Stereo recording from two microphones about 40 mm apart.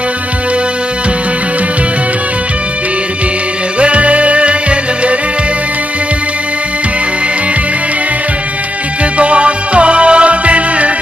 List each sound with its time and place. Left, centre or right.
3.8 s music: right
9.2 s music: right